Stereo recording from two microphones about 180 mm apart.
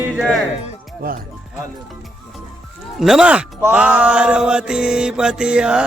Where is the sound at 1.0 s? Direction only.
55° right (ahead or behind).